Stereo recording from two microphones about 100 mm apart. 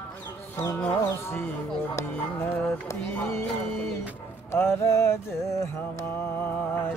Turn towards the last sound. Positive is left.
turn(degrees=30)  # may be behind; listen again after turning